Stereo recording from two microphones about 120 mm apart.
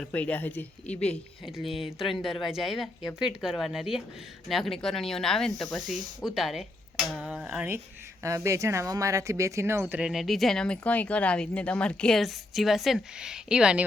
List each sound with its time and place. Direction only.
0.0 s speech: 10° left (ahead or behind)
1.5 s speech: centre (ahead or behind)
8.2 s speech: 25° right (ahead or behind)
10.0 s speech: 5° right (ahead or behind)